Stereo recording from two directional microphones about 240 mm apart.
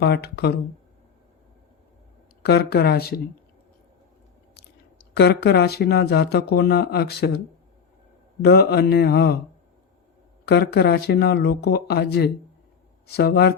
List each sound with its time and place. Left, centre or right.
0.0 s speech: left
2.4 s speech: left
5.1 s speech: left
10.4 s speech: left